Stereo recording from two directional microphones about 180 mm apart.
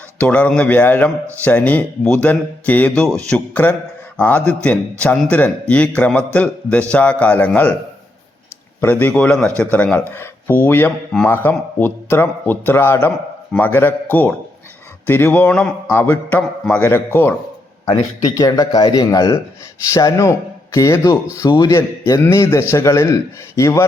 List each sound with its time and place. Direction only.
0.2 s speech: 10° left (ahead or behind)
8.8 s speech: 10° left (ahead or behind)
18.3 s speech: 20° left (ahead or behind)